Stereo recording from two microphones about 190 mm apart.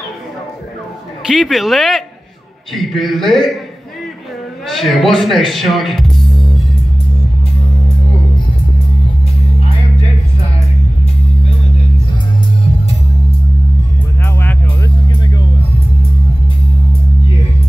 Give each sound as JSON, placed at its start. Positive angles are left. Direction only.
{"t": 1.3, "sound": "a man's voice", "side_deg": 0}
{"t": 4.6, "sound": "speech", "side_deg": 0}
{"t": 14.4, "sound": "music", "side_deg": 20}